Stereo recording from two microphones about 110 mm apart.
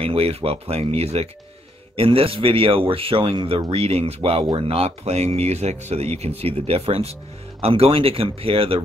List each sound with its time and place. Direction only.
0.0 s speech: 60° right (ahead or behind)
2.0 s speech: 55° right (ahead or behind)
3.7 s speech: 65° right (ahead or behind)